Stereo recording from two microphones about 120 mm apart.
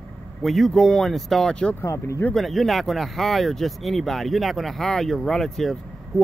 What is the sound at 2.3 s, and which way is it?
Speech, centre (ahead or behind).